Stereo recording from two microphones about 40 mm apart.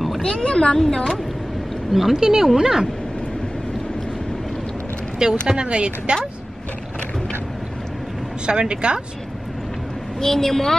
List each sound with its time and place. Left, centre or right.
0.2 s speech: left
0.7 s a woman's voice: centre
1.9 s speech: centre
5.2 s speech: centre
8.5 s speech: right
10.2 s a woman's voice: centre